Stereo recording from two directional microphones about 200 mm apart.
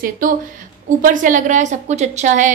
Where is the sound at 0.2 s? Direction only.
40° right (ahead or behind).